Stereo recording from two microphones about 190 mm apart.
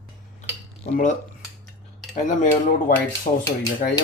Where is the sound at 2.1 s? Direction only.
40° left (ahead or behind).